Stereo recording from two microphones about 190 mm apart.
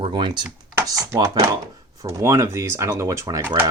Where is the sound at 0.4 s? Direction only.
15° right (ahead or behind).